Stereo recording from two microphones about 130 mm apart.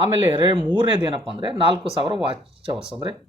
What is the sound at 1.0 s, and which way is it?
Speech, 40° right (ahead or behind).